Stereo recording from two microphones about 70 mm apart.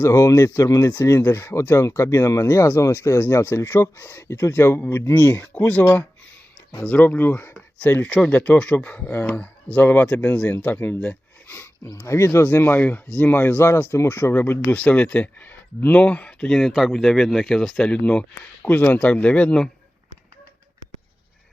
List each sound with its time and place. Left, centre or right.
0.0 s speech: left
5.8 s speech: left
6.8 s speech: left
8.1 s speech: centre; by 11.7 s left
11.9 s speech: left
14.7 s speech: centre
17.8 s speech: centre